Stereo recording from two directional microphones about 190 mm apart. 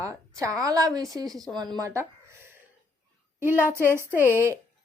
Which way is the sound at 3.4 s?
10° right (ahead or behind).